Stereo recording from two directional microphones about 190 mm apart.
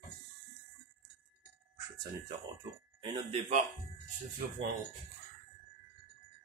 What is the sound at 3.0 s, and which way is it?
Speech, 30° right (ahead or behind).